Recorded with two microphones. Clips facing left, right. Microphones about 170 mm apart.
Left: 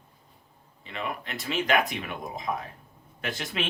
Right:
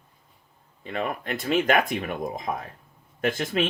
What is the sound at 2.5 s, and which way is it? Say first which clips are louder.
Speech: right 1 dB; 40° right (ahead or behind).